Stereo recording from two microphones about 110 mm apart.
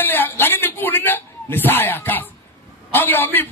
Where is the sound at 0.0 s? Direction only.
20° left (ahead or behind).